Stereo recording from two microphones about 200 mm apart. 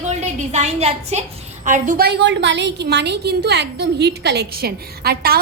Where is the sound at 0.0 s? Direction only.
35° right (ahead or behind).